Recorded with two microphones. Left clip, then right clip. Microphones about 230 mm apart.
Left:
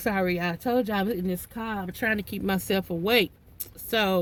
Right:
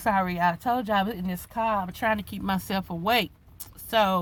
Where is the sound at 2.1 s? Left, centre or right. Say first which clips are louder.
Even; right.